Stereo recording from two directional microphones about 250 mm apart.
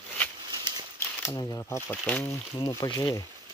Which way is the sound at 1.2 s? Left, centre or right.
Centre.